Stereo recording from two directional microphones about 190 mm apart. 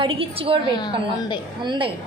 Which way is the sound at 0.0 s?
30° right (ahead or behind).